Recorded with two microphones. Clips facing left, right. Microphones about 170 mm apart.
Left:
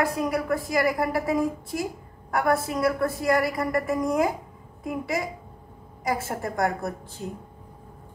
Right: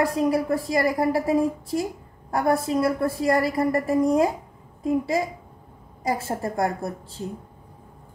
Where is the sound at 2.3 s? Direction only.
30° right (ahead or behind).